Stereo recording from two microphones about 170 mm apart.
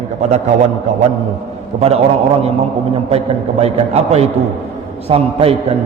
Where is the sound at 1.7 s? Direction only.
35° right (ahead or behind).